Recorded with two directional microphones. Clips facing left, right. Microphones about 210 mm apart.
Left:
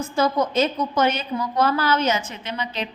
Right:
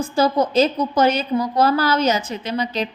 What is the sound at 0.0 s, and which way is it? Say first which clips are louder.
A woman's voice: right 3 dB; 35° right (ahead or behind).